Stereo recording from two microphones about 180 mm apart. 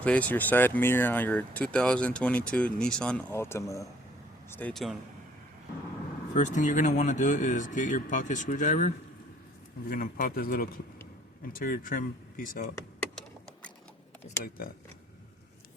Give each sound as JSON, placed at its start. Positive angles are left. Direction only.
{"t": 0.0, "sound": "speech", "side_deg": 10}
{"t": 4.7, "sound": "speech", "side_deg": 0}
{"t": 6.3, "sound": "speech", "side_deg": 45}
{"t": 9.9, "sound": "speech", "side_deg": 50}